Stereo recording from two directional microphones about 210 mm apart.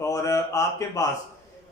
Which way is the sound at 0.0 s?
15° left (ahead or behind).